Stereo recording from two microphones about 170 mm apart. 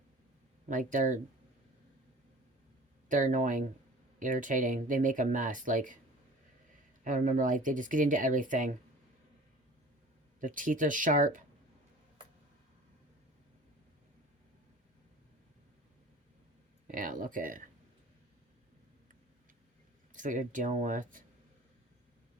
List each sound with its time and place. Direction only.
0.7 s speech: 50° right (ahead or behind)
3.1 s speech: 50° right (ahead or behind)
7.0 s speech: 50° right (ahead or behind)
10.4 s speech: 50° right (ahead or behind)
16.8 s speech: 50° right (ahead or behind)
20.1 s speech: 50° right (ahead or behind)